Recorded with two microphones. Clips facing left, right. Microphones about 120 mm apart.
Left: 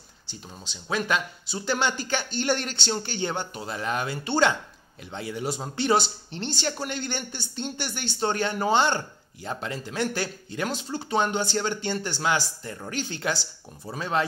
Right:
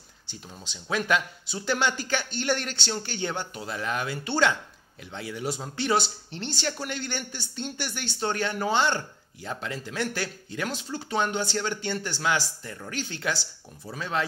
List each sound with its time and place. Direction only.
0.8 s speech: 25° left (ahead or behind)